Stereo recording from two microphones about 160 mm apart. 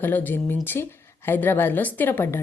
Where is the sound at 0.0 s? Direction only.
10° left (ahead or behind).